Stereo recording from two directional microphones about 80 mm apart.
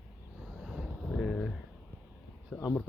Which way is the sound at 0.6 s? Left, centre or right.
Centre.